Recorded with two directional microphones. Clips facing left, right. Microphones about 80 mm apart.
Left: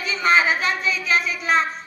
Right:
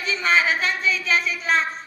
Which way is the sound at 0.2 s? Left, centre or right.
Centre.